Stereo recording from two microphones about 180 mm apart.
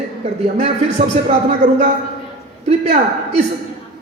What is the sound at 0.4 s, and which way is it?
A man's voice, 40° right (ahead or behind).